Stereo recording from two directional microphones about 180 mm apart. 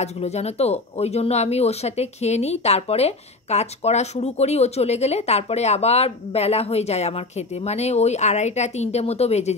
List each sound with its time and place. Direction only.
0.0 s speech: 35° left (ahead or behind)